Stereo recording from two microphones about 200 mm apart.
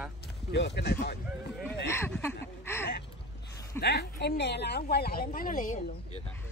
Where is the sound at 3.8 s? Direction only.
55° left (ahead or behind); by 6.2 s 40° left (ahead or behind).